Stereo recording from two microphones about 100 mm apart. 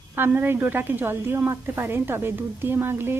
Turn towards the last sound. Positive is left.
turn(degrees=-25)  # may be behind; listen again after turning